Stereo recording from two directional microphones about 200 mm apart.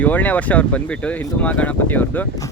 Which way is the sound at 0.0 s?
10° left (ahead or behind).